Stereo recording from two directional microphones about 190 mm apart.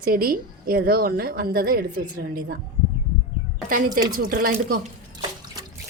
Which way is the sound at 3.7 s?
45° right (ahead or behind).